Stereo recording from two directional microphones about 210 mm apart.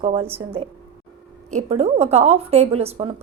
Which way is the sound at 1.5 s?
30° right (ahead or behind).